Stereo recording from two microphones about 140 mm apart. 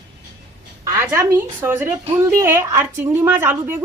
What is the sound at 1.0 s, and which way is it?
A woman's voice, 20° right (ahead or behind).